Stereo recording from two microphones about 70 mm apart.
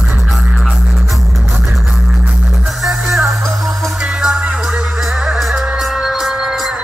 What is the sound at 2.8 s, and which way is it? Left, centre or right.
Music, centre.